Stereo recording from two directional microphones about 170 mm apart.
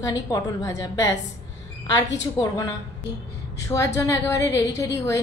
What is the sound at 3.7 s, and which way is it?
Speech, 20° left (ahead or behind).